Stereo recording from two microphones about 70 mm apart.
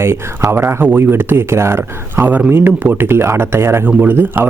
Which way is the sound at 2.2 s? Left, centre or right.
Right.